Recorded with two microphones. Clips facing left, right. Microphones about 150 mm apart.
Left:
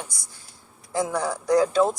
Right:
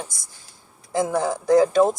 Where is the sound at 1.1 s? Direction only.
50° right (ahead or behind).